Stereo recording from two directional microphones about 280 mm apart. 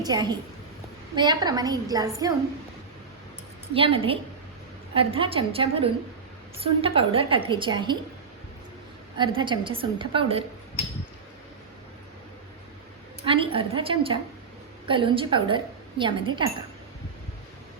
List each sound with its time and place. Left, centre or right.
0.0 s a woman's voice: centre
3.8 s a woman's voice: centre
9.1 s a woman's voice: centre
13.2 s a woman's voice: centre